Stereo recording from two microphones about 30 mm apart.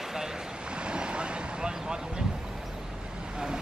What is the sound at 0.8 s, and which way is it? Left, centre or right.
Vehicle, right.